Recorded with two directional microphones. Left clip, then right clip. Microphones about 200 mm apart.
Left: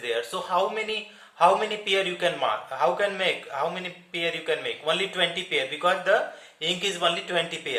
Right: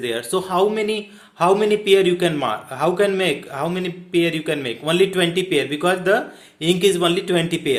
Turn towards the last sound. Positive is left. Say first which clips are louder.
# right 7 dB
turn(degrees=-50)  # may be behind; listen again after turning